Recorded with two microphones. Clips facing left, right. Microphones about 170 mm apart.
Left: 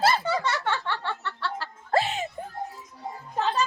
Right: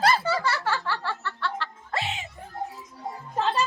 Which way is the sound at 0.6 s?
5° right (ahead or behind).